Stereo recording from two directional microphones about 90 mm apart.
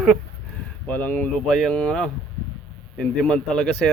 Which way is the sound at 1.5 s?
5° left (ahead or behind).